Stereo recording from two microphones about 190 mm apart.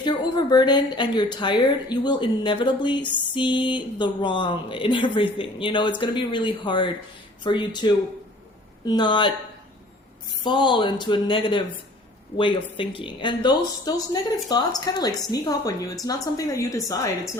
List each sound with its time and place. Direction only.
0.0 s a woman's voice: 20° left (ahead or behind)
10.4 s a woman's voice: 25° left (ahead or behind)